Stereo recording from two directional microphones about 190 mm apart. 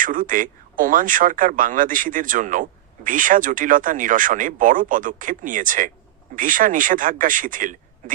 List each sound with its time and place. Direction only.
0.0 s speech: 45° right (ahead or behind)